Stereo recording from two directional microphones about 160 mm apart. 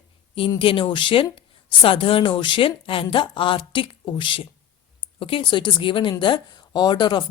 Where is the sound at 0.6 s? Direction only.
35° left (ahead or behind).